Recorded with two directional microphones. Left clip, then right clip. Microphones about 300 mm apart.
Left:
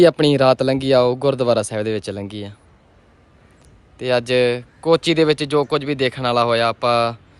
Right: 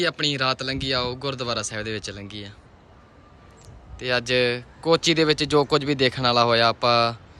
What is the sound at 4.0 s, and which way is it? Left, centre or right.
Speech, centre.